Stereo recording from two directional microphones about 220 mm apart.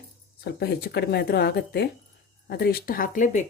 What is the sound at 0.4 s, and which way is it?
Speech, 45° left (ahead or behind).